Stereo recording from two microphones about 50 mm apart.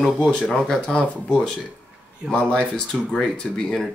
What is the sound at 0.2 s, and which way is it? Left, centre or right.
Speech, centre.